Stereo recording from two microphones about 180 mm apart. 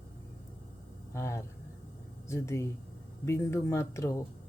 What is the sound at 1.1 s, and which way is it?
Speech, 15° left (ahead or behind).